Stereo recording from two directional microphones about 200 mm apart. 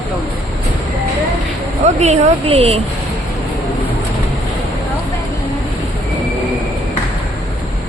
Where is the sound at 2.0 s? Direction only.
35° right (ahead or behind).